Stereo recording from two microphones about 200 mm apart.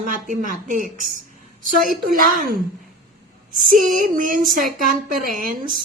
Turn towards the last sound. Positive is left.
turn(degrees=-40)  # may be behind; listen again after turning